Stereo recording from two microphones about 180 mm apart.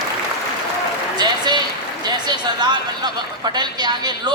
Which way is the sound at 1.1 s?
25° right (ahead or behind).